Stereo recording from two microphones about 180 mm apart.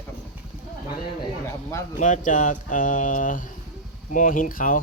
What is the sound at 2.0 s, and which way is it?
Speech, 45° left (ahead or behind).